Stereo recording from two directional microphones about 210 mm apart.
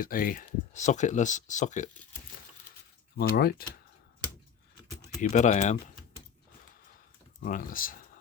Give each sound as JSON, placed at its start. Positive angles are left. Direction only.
{"t": 0.0, "sound": "speech", "side_deg": 45}
{"t": 3.2, "sound": "speech", "side_deg": 50}
{"t": 5.3, "sound": "speech", "side_deg": 35}
{"t": 7.4, "sound": "speech", "side_deg": 40}